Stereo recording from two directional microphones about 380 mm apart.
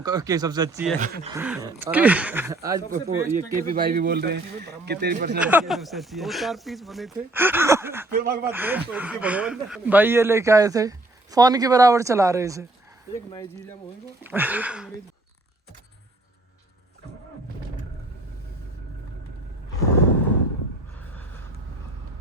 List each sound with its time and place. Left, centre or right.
0.0 s speech: centre
0.9 s a man's voice: centre
1.3 s speech: centre
2.9 s a man's voice: right
5.5 s speech: centre
8.1 s a man's voice: right
8.4 s speech: centre
13.3 s speech: centre
14.3 s speech: centre
21.0 s vehicle: centre